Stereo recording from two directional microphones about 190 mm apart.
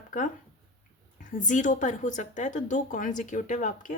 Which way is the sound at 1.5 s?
40° left (ahead or behind).